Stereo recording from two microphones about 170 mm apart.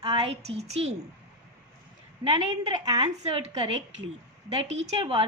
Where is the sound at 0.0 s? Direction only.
35° right (ahead or behind).